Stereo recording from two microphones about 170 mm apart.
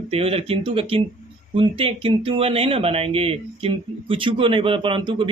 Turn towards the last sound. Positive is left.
turn(degrees=-30)  # may be behind; listen again after turning